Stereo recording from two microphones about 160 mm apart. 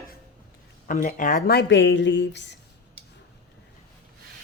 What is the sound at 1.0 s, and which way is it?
Speech, 55° left (ahead or behind).